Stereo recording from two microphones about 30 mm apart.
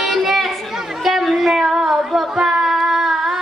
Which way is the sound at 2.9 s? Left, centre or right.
Centre.